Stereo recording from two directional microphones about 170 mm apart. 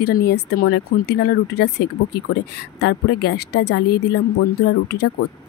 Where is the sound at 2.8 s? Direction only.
85° left.